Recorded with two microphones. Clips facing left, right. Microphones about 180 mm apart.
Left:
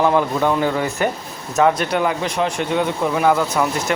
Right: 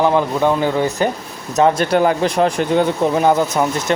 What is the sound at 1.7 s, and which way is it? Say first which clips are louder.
Speech: right 5 dB; 40° right (ahead or behind).